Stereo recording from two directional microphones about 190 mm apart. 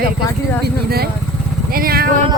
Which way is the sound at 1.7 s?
50° right (ahead or behind).